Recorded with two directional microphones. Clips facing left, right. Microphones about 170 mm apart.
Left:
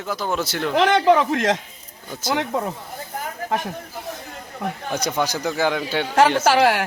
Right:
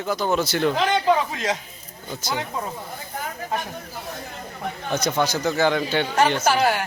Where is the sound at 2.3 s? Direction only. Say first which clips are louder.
Left 6 dB; 70° left (ahead or behind).